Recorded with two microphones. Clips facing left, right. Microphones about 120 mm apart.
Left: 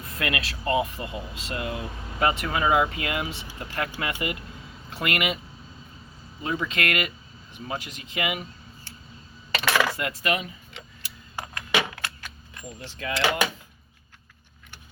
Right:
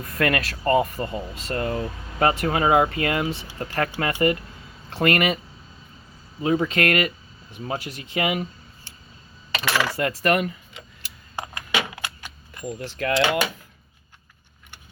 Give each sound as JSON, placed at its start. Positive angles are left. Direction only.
{"t": 0.0, "sound": "speech", "side_deg": -55}
{"t": 6.4, "sound": "speech", "side_deg": -45}
{"t": 9.5, "sound": "coin", "side_deg": 0}
{"t": 10.0, "sound": "speech", "side_deg": -50}
{"t": 11.3, "sound": "a sound", "side_deg": -15}
{"t": 13.0, "sound": "speech", "side_deg": -75}